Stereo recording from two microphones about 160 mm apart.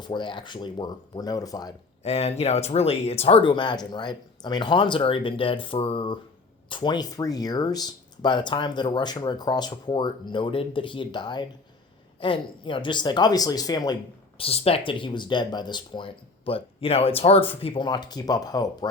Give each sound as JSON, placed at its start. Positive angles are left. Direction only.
{"t": 0.0, "sound": "speech", "side_deg": 30}
{"t": 2.0, "sound": "speech", "side_deg": 40}